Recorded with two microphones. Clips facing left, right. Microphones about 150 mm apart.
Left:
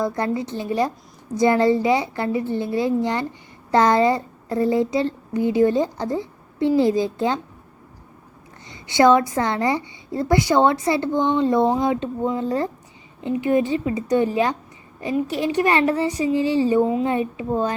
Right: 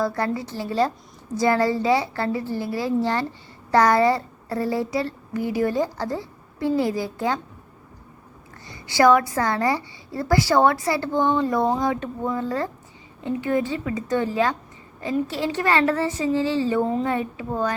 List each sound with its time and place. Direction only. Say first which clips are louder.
0.0 s speech: left 1 dB; 20° left (ahead or behind)
8.6 s a woman's voice: left 2 dB; 20° left (ahead or behind)